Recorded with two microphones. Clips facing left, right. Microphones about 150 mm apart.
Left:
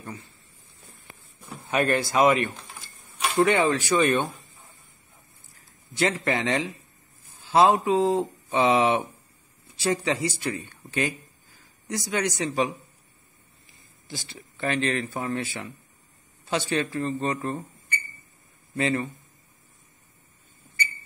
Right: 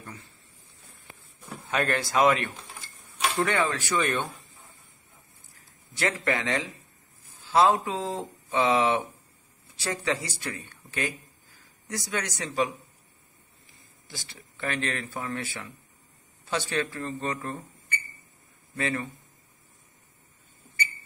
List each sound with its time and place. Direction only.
1.7 s speech: 10° left (ahead or behind)
3.3 s speech: 20° left (ahead or behind)
5.9 s speech: 20° left (ahead or behind)
14.6 s speech: 25° left (ahead or behind)
18.8 s speech: 20° left (ahead or behind)